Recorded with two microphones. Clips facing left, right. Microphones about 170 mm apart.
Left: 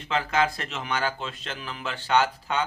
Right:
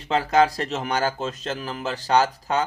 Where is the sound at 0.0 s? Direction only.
35° right (ahead or behind).